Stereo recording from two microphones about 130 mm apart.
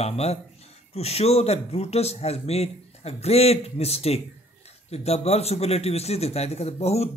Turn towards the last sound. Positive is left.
turn(degrees=55)  # may be behind; listen again after turning